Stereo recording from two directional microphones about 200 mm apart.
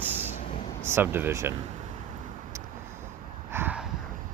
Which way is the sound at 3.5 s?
10° right (ahead or behind).